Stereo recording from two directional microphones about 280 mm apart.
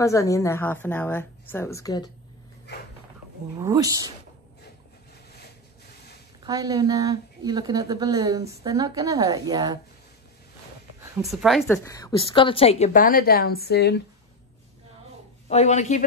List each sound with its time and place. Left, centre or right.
0.0 s a woman's voice: centre
3.5 s a woman's voice: centre
6.4 s a woman's voice: centre
11.2 s a woman's voice: centre; by 14.0 s left
15.4 s a woman's voice: left